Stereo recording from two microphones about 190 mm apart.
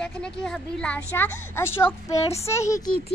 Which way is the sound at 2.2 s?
35° left (ahead or behind).